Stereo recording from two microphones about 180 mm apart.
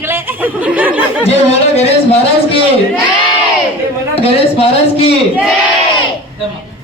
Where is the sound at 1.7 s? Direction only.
35° left (ahead or behind).